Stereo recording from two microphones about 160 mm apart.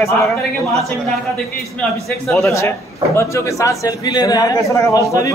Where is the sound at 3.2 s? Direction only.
20° left (ahead or behind).